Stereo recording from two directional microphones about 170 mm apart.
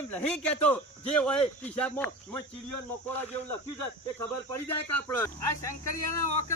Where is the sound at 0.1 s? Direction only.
10° left (ahead or behind).